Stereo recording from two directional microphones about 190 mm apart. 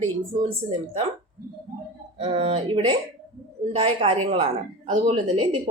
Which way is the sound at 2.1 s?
30° right (ahead or behind).